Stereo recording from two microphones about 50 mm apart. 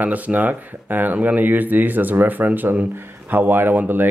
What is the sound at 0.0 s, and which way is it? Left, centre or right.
Speech, right.